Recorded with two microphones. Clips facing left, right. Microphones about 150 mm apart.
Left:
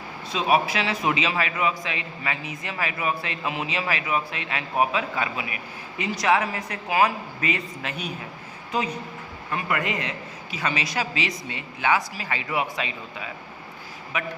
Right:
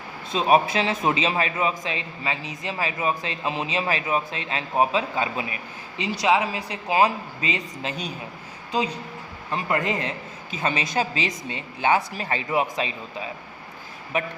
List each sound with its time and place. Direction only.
0.3 s a man's voice: 30° right (ahead or behind)